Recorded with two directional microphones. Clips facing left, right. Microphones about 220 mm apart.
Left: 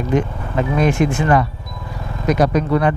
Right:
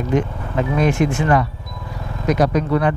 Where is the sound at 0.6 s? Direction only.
20° left (ahead or behind).